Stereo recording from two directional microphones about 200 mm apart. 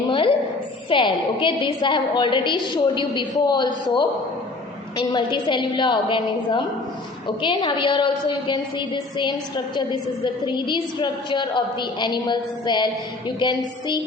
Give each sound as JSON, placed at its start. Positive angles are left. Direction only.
{"t": 0.1, "sound": "a sound", "side_deg": 25}
{"t": 0.9, "sound": "a woman's voice", "side_deg": 25}
{"t": 4.9, "sound": "a woman's voice", "side_deg": 25}
{"t": 10.4, "sound": "a woman's voice", "side_deg": 20}